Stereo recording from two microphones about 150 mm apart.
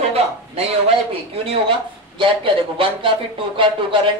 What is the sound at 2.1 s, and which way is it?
A woman's voice, 35° right (ahead or behind).